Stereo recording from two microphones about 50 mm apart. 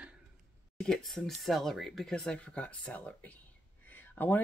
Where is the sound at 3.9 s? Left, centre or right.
Left.